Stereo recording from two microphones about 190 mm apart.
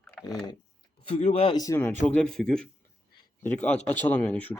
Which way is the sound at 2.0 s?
5° left (ahead or behind).